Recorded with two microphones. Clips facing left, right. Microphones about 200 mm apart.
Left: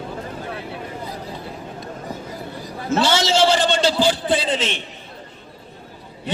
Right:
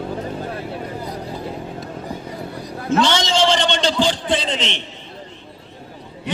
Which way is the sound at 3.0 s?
5° left (ahead or behind).